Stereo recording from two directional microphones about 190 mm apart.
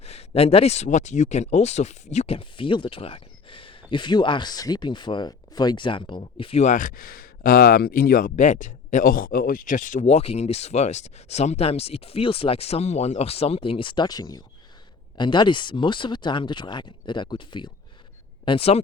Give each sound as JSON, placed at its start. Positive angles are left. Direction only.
{"t": 0.0, "sound": "speech", "side_deg": 35}